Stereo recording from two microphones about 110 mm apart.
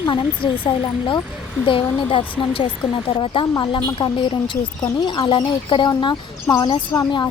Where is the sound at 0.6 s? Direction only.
50° left (ahead or behind).